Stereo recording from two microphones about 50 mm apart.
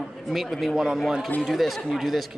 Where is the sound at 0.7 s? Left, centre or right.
Centre.